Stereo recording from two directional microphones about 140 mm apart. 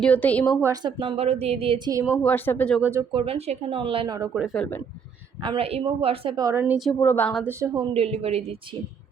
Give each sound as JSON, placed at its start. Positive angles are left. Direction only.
{"t": 0.0, "sound": "a woman's voice", "side_deg": 10}
{"t": 0.6, "sound": "a woman's voice", "side_deg": -25}
{"t": 2.2, "sound": "a woman's voice", "side_deg": 15}
{"t": 2.8, "sound": "a woman's voice", "side_deg": -20}
{"t": 3.1, "sound": "a woman's voice", "side_deg": -40}
{"t": 4.5, "sound": "a woman's voice", "side_deg": 10}
{"t": 5.4, "sound": "speech", "side_deg": -40}
{"t": 6.3, "sound": "a woman's voice", "side_deg": -25}
{"t": 6.7, "sound": "a woman's voice", "side_deg": 0}
{"t": 7.0, "sound": "a woman's voice", "side_deg": 15}
{"t": 7.7, "sound": "speech", "side_deg": -40}